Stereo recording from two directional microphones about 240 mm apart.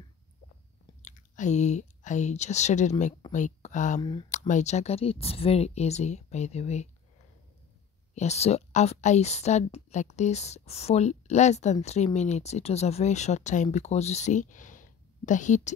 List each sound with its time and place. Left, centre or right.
1.0 s speech: left
4.0 s speech: centre
4.3 s speech: left
8.1 s speech: left